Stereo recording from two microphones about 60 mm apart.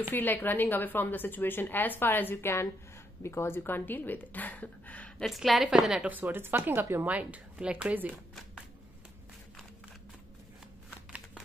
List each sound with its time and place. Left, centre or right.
0.1 s a woman's voice: left
3.2 s a woman's voice: left
5.2 s a woman's voice: centre
6.0 s speech: right
7.1 s speech: right